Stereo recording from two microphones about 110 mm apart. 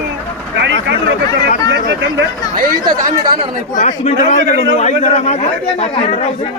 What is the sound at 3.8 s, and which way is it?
A man's voice, 90° left.